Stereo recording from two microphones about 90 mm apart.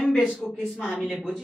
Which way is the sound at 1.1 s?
Centre (ahead or behind).